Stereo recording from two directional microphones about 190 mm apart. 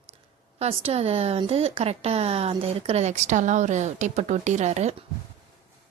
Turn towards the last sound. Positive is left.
turn(degrees=-35)  # may be behind; listen again after turning